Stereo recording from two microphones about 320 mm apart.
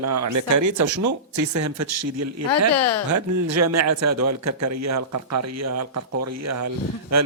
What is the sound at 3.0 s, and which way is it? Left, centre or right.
A man's voice, right.